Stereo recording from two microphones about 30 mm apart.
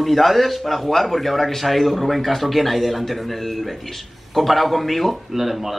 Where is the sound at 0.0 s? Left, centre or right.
Centre.